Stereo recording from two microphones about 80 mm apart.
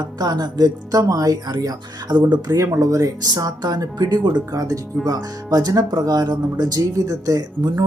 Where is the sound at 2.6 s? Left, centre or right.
Right.